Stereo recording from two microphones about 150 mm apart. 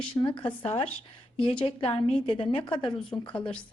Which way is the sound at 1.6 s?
35° left (ahead or behind).